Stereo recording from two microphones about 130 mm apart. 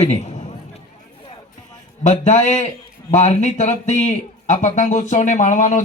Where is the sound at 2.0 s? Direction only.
60° left (ahead or behind).